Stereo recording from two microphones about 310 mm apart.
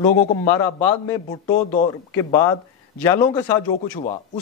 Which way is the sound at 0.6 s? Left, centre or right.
Centre.